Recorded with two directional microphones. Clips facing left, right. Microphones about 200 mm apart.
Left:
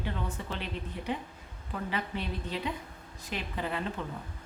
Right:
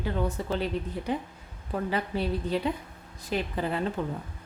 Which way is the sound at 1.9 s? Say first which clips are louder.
Right 6 dB; 40° right (ahead or behind).